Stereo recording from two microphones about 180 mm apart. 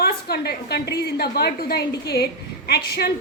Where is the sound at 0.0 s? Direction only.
60° left (ahead or behind).